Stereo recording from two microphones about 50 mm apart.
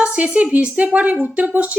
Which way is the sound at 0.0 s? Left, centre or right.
Right.